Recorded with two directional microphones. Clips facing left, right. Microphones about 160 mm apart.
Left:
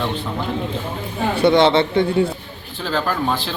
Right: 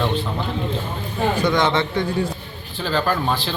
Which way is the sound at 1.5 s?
30° left (ahead or behind).